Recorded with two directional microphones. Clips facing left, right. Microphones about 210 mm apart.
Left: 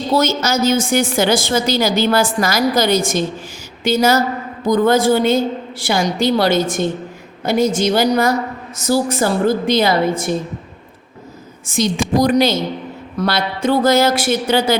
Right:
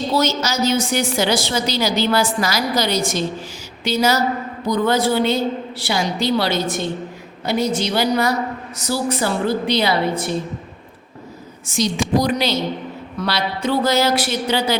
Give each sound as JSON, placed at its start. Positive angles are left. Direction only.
{"t": 0.2, "sound": "a woman's voice", "side_deg": 50}
{"t": 11.6, "sound": "a woman's voice", "side_deg": 55}